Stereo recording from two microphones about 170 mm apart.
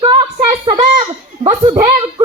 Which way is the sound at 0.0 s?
30° right (ahead or behind).